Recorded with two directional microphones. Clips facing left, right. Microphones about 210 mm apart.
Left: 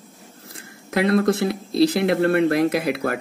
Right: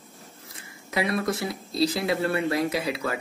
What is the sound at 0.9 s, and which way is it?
Speech, 65° left (ahead or behind).